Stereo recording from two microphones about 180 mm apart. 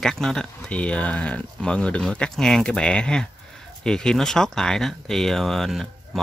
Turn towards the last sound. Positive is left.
turn(degrees=0)  # may be behind; listen again after turning